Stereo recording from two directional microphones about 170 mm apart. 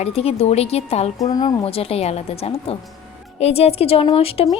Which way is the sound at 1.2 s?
25° left (ahead or behind).